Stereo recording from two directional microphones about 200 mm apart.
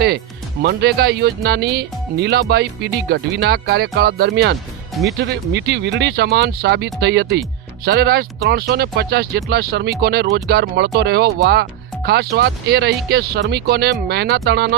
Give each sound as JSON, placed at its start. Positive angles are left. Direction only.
{"t": 0.6, "sound": "speech", "side_deg": -55}